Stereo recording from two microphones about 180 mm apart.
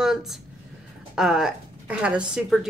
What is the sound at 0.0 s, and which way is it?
A woman's voice, centre (ahead or behind).